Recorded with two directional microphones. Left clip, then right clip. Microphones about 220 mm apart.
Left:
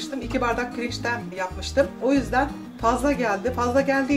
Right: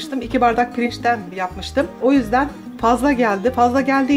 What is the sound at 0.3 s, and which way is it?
Speech, 45° right (ahead or behind).